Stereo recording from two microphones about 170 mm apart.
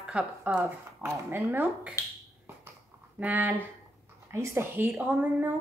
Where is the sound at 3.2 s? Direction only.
10° right (ahead or behind).